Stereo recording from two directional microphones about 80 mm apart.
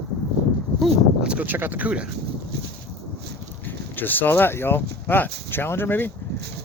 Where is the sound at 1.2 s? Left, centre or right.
Right.